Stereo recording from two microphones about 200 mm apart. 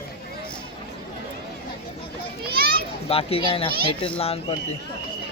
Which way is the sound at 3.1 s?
30° left (ahead or behind).